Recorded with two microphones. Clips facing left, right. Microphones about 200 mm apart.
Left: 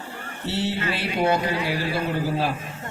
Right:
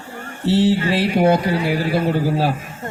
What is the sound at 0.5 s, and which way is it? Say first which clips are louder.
A man's voice: right 10 dB; 35° right (ahead or behind).